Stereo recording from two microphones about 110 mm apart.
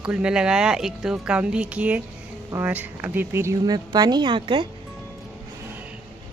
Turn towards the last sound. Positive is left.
turn(degrees=-50)  # may be behind; listen again after turning